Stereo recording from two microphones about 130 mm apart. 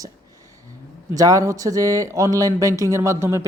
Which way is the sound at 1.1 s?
25° right (ahead or behind).